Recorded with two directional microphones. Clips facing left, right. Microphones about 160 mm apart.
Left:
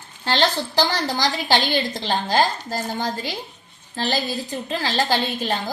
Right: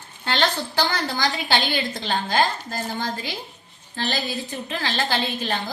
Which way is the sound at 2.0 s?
40° left (ahead or behind).